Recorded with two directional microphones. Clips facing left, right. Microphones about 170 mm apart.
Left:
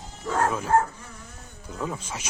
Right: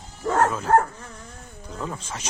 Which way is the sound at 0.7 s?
60° right (ahead or behind).